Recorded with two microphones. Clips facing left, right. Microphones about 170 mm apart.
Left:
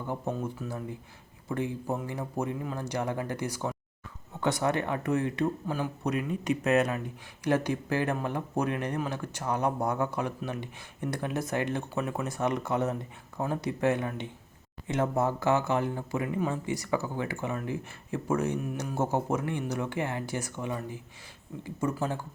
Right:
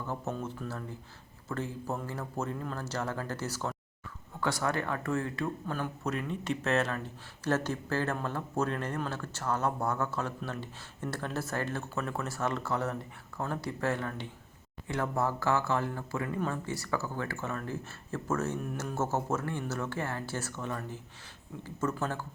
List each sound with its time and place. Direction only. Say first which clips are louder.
0.1 s speech: left 4 dB; 10° left (ahead or behind)